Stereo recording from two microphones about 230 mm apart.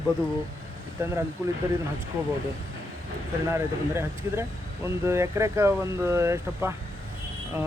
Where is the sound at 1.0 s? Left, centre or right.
Centre.